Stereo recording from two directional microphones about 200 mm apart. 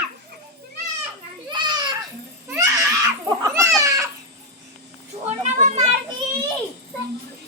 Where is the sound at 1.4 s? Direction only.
20° right (ahead or behind).